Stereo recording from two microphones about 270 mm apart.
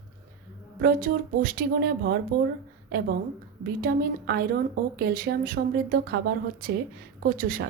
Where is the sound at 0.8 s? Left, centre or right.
Right.